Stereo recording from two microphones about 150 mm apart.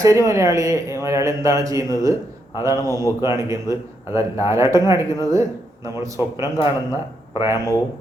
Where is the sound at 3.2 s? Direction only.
20° right (ahead or behind).